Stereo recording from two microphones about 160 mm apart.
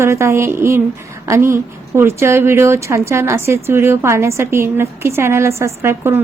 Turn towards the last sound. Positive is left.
turn(degrees=-15)  # may be behind; listen again after turning